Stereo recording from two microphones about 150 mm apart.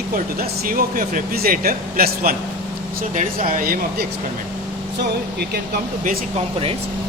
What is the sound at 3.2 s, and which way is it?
Speech, 65° right (ahead or behind).